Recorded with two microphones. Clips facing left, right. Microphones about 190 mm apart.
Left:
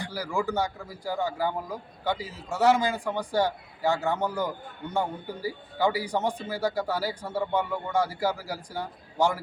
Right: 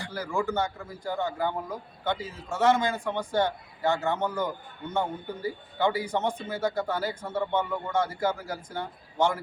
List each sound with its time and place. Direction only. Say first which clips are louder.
0.1 s speech: right 1 dB; 10° left (ahead or behind)